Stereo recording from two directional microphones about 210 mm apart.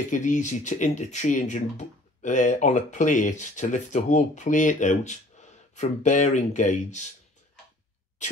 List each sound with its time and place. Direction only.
0.1 s speech: 35° left (ahead or behind)